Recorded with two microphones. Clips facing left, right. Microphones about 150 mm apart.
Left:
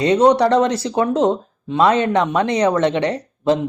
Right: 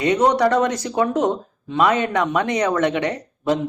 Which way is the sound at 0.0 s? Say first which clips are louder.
Left 3 dB; 25° left (ahead or behind).